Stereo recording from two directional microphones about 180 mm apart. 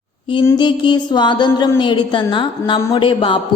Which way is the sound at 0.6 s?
25° left (ahead or behind).